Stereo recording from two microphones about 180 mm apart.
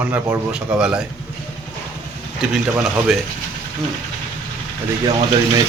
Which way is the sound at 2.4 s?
Centre (ahead or behind).